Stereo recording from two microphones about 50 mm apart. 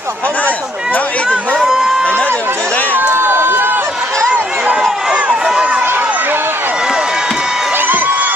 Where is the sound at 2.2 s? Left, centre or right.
Left.